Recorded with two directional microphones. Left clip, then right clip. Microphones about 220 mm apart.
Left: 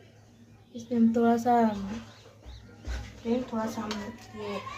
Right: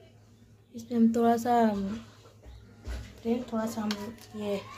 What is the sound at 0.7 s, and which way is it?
A woman's voice, 50° right (ahead or behind).